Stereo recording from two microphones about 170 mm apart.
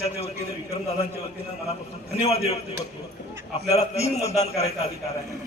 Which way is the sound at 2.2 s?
40° left (ahead or behind).